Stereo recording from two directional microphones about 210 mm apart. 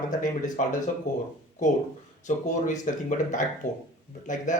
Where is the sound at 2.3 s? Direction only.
35° left (ahead or behind).